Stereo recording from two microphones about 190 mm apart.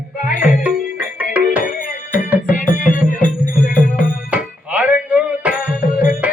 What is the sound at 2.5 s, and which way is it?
Music, 45° left (ahead or behind).